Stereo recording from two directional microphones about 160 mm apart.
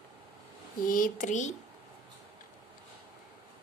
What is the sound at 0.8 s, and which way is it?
Speech, 60° left (ahead or behind).